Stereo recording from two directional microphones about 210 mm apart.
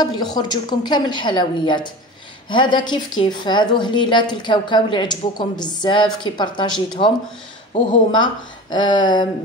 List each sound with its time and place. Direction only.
0.0 s a woman's voice: 20° left (ahead or behind)
8.1 s a woman's voice: 20° left (ahead or behind)